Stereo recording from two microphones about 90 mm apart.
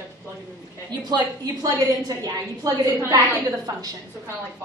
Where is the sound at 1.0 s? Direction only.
50° right (ahead or behind).